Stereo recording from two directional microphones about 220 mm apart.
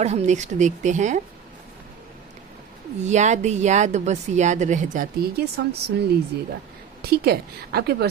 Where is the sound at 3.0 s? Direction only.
30° right (ahead or behind).